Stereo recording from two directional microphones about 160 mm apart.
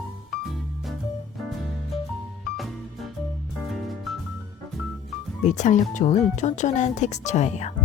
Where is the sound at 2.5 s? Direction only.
Centre (ahead or behind).